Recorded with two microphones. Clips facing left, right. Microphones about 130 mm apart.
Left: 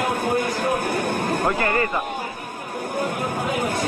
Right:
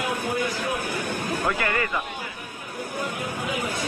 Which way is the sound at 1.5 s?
35° left (ahead or behind).